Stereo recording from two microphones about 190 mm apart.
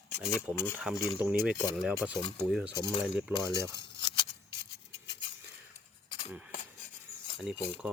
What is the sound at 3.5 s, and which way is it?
Speech, 20° right (ahead or behind).